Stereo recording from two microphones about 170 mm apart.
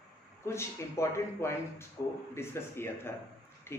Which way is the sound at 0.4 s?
15° left (ahead or behind).